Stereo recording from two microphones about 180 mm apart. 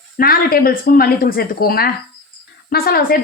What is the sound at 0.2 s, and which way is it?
A woman's voice, 55° left (ahead or behind).